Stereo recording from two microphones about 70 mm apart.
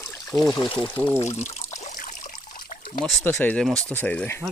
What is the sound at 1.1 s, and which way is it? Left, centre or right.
Speech, left.